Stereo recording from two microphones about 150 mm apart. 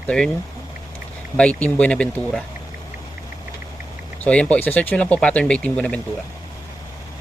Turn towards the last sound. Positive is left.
turn(degrees=10)  # may be behind; listen again after turning